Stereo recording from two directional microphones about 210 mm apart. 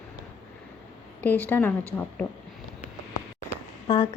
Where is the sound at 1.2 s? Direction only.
10° left (ahead or behind).